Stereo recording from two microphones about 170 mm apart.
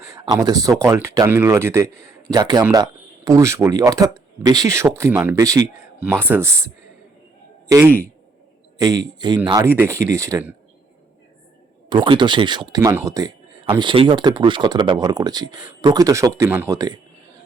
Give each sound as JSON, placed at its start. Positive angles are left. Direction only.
{"t": 0.0, "sound": "speech", "side_deg": -20}
{"t": 8.8, "sound": "speech", "side_deg": -20}
{"t": 9.6, "sound": "speech", "side_deg": -15}
{"t": 11.9, "sound": "speech", "side_deg": -30}
{"t": 13.7, "sound": "speech", "side_deg": -30}